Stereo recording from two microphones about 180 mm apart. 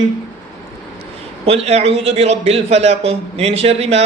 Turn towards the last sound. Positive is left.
turn(degrees=-35)  # may be behind; listen again after turning